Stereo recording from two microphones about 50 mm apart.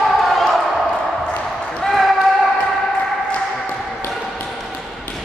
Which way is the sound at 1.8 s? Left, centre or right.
Centre.